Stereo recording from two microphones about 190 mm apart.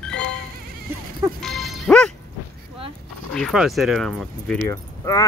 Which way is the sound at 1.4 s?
Centre (ahead or behind).